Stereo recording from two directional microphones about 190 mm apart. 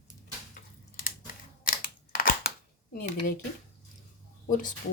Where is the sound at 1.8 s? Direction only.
45° left (ahead or behind).